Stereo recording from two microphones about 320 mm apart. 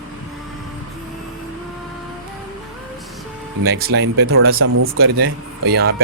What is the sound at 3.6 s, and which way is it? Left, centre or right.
Speech, right.